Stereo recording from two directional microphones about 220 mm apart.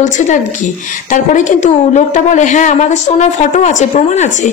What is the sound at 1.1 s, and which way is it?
A woman's voice, 35° left (ahead or behind).